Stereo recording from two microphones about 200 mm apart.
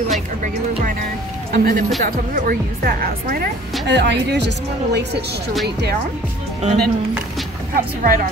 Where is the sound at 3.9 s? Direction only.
60° right (ahead or behind).